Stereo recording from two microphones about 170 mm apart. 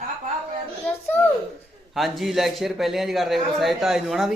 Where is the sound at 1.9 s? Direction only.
Centre (ahead or behind).